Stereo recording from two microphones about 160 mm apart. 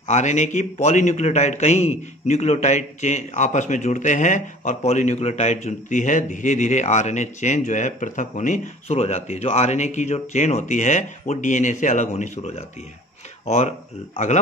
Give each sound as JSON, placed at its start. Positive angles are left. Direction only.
{"t": 0.0, "sound": "a man's voice", "side_deg": 45}